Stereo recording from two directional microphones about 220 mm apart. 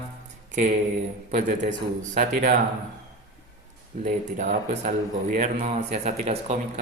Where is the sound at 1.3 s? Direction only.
40° right (ahead or behind).